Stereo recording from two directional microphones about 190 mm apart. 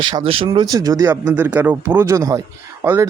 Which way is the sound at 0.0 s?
25° right (ahead or behind).